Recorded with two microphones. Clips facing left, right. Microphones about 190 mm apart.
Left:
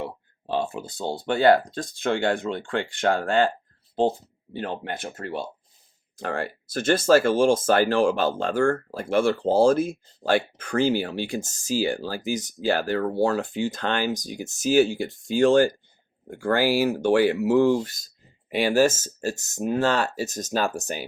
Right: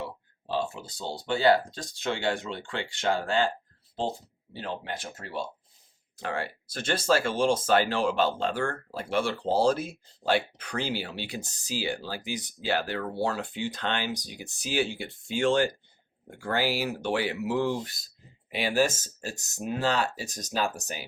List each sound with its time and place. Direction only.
0.5 s speech: 55° left (ahead or behind)
4.5 s speech: 55° left (ahead or behind)
6.1 s speech: 45° left (ahead or behind)